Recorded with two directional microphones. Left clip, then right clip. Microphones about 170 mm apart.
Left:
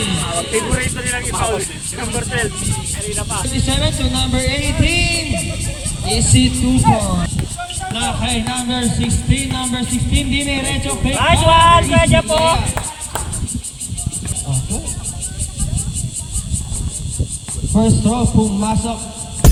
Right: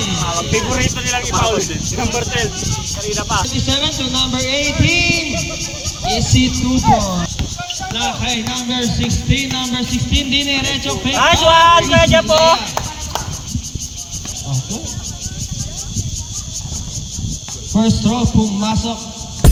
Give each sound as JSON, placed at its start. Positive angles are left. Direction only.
{"t": 0.0, "sound": "music", "side_deg": 30}
{"t": 0.8, "sound": "speech", "side_deg": -40}
{"t": 3.5, "sound": "music", "side_deg": 25}
{"t": 7.9, "sound": "music", "side_deg": 45}
{"t": 11.2, "sound": "speech", "side_deg": -25}
{"t": 17.7, "sound": "speech", "side_deg": 15}